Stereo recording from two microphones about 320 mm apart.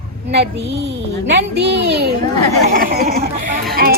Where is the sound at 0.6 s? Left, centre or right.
Right.